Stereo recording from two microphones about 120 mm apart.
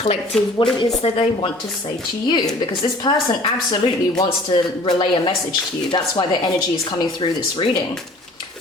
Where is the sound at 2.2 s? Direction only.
35° left (ahead or behind).